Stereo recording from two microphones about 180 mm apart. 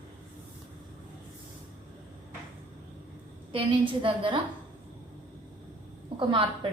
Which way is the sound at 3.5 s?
30° right (ahead or behind).